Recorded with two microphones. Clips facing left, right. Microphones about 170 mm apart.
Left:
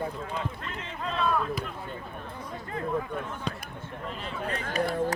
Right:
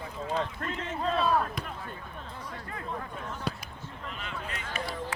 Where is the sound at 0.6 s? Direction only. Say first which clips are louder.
Right 4 dB; 50° right (ahead or behind).